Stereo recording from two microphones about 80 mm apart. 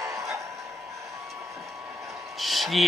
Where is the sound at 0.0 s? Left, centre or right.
Right.